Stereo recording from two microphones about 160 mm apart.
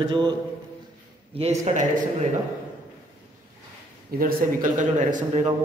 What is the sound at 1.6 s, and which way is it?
Speech, 50° right (ahead or behind).